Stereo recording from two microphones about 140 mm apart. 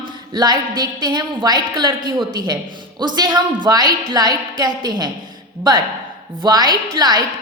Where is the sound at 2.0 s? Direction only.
35° right (ahead or behind).